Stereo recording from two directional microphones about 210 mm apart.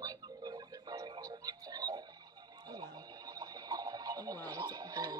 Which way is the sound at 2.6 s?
20° right (ahead or behind).